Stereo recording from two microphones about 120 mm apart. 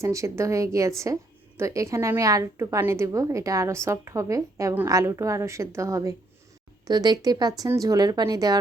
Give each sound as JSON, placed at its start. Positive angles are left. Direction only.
{"t": 0.0, "sound": "a woman's voice", "side_deg": -25}